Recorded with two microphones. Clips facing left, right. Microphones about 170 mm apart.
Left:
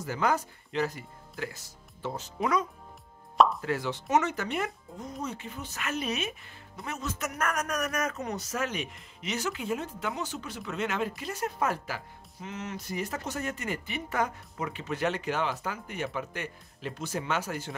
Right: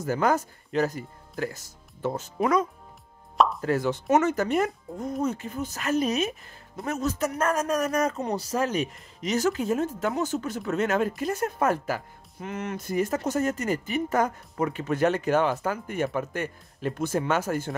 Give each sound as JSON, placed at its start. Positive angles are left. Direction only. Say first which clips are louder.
{"t": 0.0, "sound": "speech", "louder": "right 4 dB", "side_deg": -45}
{"t": 3.3, "sound": "plop", "louder": "even", "side_deg": 0}
{"t": 3.6, "sound": "a man's voice", "louder": "right 6 dB", "side_deg": -45}